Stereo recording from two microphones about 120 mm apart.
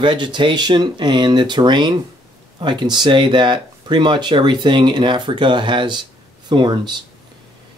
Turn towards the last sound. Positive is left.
turn(degrees=-40)  # may be behind; listen again after turning